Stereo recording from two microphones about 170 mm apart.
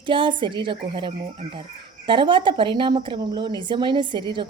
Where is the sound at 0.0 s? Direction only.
30° right (ahead or behind).